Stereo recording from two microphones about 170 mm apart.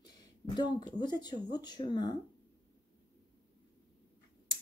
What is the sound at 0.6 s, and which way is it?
Speech, 25° left (ahead or behind).